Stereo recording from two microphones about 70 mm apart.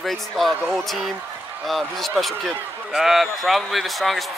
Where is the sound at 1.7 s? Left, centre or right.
Centre.